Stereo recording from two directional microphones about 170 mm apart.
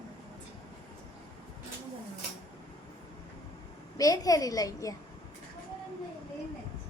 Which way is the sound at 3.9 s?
20° left (ahead or behind).